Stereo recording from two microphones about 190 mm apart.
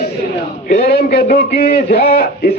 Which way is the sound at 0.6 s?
55° left (ahead or behind).